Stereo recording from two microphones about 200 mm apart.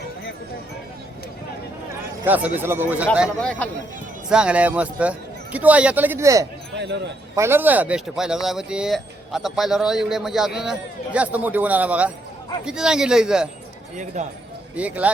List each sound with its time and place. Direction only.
2.2 s a man's voice: 10° right (ahead or behind)
3.2 s a man's voice: 5° left (ahead or behind); by 6.5 s 15° right (ahead or behind)
6.7 s a sound: 60° right (ahead or behind)
7.3 s a man's voice: 10° right (ahead or behind)
13.9 s speech: 35° right (ahead or behind)
14.8 s a man's voice: 5° right (ahead or behind)